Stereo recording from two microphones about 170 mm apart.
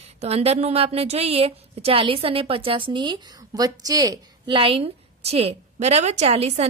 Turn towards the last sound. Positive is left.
turn(degrees=-40)  # may be behind; listen again after turning